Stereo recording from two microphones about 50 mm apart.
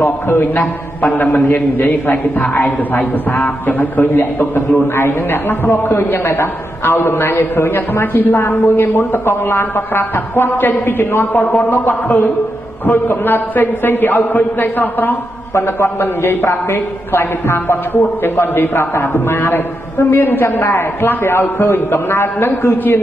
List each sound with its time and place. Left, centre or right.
0.0 s a man's voice: left
15.5 s a man's voice: left